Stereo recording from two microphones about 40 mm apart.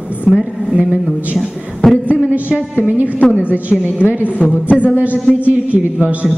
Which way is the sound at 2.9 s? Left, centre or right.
Right.